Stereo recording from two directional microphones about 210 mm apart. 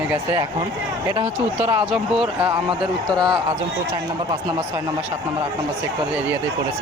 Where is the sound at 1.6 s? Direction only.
5° right (ahead or behind).